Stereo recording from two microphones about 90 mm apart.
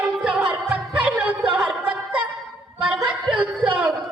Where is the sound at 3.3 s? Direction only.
15° right (ahead or behind).